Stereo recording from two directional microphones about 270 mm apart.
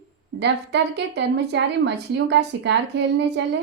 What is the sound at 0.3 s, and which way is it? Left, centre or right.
A woman's voice, right.